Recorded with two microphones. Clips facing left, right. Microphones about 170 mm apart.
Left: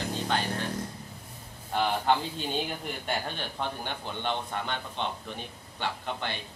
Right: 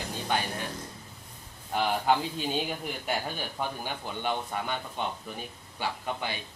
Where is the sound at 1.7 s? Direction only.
5° right (ahead or behind).